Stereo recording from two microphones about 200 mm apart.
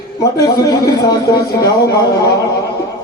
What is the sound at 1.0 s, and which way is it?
Speech, 20° left (ahead or behind).